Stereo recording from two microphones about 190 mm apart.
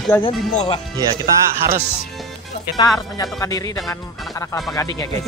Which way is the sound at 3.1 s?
15° left (ahead or behind).